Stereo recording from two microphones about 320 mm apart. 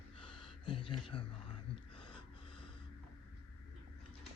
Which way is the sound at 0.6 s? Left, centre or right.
Centre.